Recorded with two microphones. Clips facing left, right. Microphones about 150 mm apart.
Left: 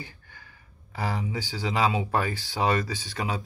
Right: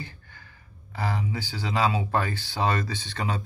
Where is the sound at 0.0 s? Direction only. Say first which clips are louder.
Right 2 dB; 15° left (ahead or behind).